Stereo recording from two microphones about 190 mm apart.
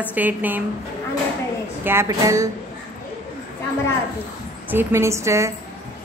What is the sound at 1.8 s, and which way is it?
Speech, 15° right (ahead or behind).